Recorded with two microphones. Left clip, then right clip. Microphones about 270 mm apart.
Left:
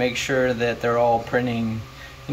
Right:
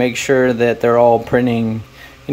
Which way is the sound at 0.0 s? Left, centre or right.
Right.